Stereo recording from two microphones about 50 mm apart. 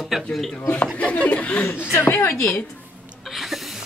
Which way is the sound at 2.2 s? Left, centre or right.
Left.